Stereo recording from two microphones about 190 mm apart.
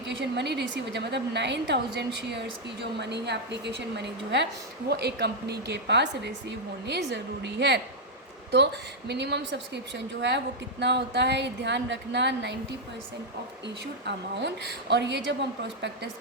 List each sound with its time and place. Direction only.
0.3 s a woman's voice: 65° right (ahead or behind)
14.0 s a woman's voice: 65° right (ahead or behind)